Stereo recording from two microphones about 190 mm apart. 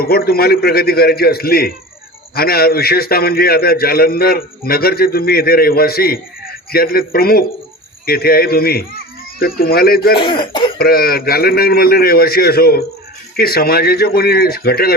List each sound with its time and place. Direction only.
0.0 s a man's voice: 50° left (ahead or behind)
10.2 s speech: 25° left (ahead or behind)
10.8 s a man's voice: 50° left (ahead or behind)